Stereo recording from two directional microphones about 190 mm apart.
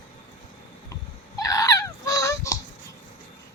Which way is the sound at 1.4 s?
20° left (ahead or behind).